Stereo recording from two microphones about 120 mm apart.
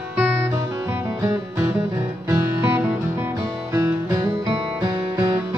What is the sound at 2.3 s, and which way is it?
Music, 20° right (ahead or behind).